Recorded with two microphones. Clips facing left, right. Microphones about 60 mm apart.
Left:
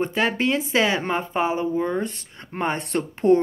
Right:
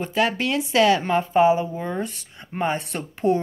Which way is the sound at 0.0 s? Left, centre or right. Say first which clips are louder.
Even; left.